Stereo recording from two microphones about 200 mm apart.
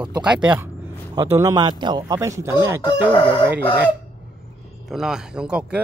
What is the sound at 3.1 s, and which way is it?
Chicken, 25° left (ahead or behind).